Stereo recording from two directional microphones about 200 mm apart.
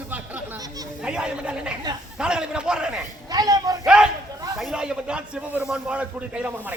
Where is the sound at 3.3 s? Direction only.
20° right (ahead or behind).